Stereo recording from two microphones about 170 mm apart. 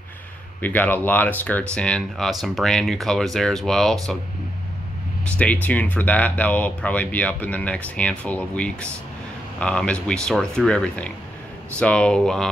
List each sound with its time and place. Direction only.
0.6 s speech: 10° left (ahead or behind)
5.4 s speech: 10° left (ahead or behind)